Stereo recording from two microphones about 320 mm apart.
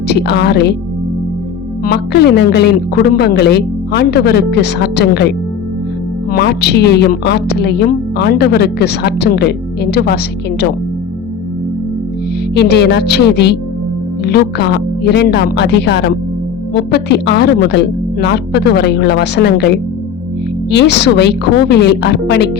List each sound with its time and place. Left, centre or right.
0.1 s a woman's voice: left
1.8 s a woman's voice: left
6.3 s a woman's voice: left
12.5 s a woman's voice: left